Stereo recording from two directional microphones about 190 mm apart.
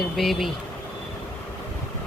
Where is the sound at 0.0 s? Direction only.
Centre (ahead or behind).